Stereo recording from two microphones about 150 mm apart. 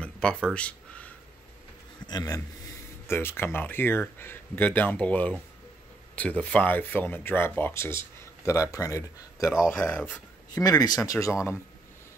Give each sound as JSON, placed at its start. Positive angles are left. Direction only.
{"t": 0.0, "sound": "a sound", "side_deg": 5}
{"t": 2.0, "sound": "a man's voice", "side_deg": 25}
{"t": 10.5, "sound": "speech", "side_deg": 25}